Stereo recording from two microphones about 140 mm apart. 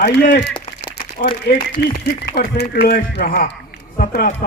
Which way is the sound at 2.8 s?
85° left.